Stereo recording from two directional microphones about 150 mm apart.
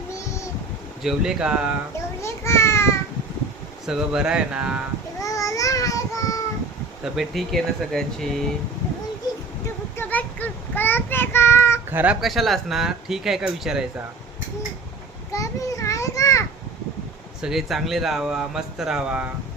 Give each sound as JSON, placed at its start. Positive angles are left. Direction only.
{"t": 0.3, "sound": "a sound", "side_deg": 20}
{"t": 1.0, "sound": "speech", "side_deg": -5}
{"t": 2.2, "sound": "a sound", "side_deg": 20}
{"t": 3.8, "sound": "speech", "side_deg": -5}
{"t": 5.2, "sound": "babbling", "side_deg": 20}
{"t": 7.0, "sound": "speech", "side_deg": 0}
{"t": 10.0, "sound": "child singing", "side_deg": 10}
{"t": 11.9, "sound": "speech", "side_deg": -15}
{"t": 12.2, "sound": "speech", "side_deg": 0}
{"t": 15.3, "sound": "a sound", "side_deg": 20}
{"t": 17.4, "sound": "speech", "side_deg": 0}